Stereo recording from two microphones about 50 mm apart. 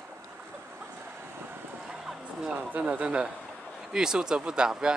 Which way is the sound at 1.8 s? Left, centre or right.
Centre.